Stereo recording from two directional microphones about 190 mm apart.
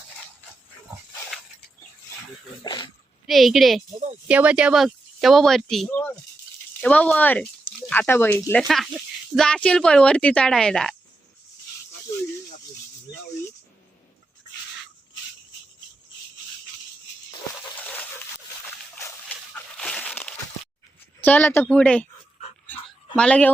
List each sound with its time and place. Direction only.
2.6 s speech: 25° left (ahead or behind)
3.2 s speech: centre (ahead or behind)
17.7 s a sound: 10° left (ahead or behind)
21.2 s speech: 10° left (ahead or behind)
23.1 s speech: 5° left (ahead or behind)